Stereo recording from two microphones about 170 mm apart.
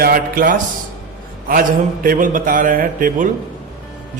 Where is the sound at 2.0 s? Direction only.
50° right (ahead or behind).